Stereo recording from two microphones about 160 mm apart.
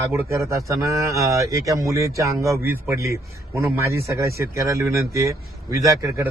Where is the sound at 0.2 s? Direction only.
20° right (ahead or behind).